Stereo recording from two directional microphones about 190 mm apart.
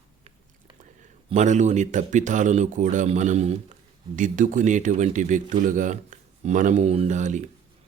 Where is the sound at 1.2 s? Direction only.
40° right (ahead or behind).